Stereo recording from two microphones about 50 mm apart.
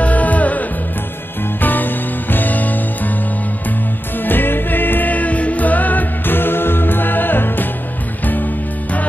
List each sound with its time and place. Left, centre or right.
0.0 s music: left
4.2 s music: left